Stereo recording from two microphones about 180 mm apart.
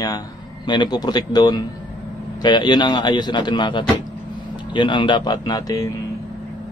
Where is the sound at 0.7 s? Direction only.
25° left (ahead or behind).